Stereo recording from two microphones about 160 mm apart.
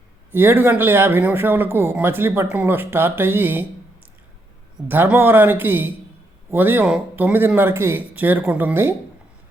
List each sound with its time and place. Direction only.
0.3 s a man's voice: 15° right (ahead or behind)
4.9 s a man's voice: 15° right (ahead or behind)